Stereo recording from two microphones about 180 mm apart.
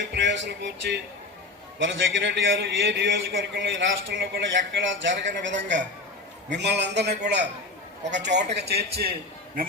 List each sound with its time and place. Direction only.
0.1 s music: 85° right
1.8 s a man's voice: 90° right; by 9.1 s 60° right (ahead or behind)